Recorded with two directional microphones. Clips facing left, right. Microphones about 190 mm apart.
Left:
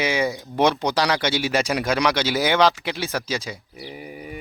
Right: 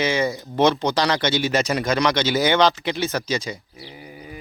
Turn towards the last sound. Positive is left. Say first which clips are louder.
# right 2 dB
turn(degrees=5)  # may be behind; listen again after turning